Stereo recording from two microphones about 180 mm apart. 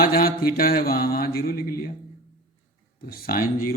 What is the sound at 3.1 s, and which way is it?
Speech, 55° left (ahead or behind).